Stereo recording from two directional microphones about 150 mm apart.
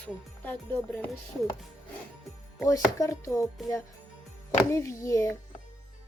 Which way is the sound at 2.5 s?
20° left (ahead or behind).